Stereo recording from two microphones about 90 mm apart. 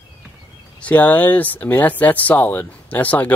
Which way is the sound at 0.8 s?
20° left (ahead or behind).